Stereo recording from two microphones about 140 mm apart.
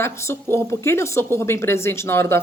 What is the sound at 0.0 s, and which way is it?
A woman's voice, 20° left (ahead or behind).